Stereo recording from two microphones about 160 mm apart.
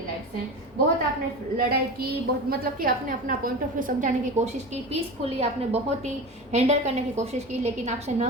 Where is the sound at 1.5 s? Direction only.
70° right (ahead or behind).